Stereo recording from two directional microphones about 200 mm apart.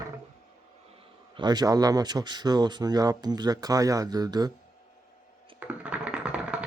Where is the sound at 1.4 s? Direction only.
20° right (ahead or behind).